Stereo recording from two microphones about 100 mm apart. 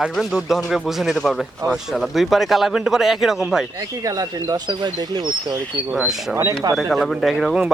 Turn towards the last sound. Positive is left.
turn(degrees=-5)  # may be behind; listen again after turning